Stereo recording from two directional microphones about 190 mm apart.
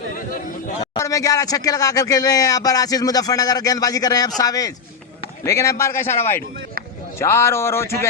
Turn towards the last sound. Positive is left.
turn(degrees=15)  # may be behind; listen again after turning